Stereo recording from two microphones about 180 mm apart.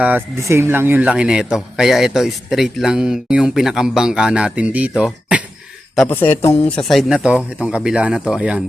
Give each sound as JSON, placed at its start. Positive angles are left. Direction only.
{"t": 0.0, "sound": "speech", "side_deg": -10}
{"t": 6.1, "sound": "speech", "side_deg": 10}